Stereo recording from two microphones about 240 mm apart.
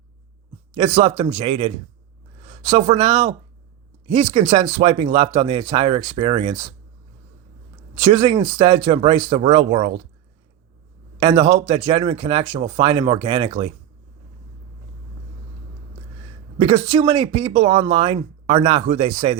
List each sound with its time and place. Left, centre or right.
0.9 s speech: right
7.9 s speech: centre
11.2 s speech: right
16.6 s speech: centre